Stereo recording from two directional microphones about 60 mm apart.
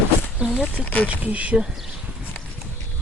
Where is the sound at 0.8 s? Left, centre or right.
Left.